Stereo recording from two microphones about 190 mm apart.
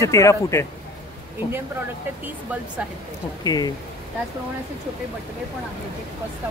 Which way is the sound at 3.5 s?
20° left (ahead or behind).